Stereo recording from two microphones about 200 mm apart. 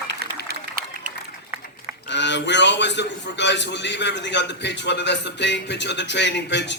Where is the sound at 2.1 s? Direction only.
60° left (ahead or behind).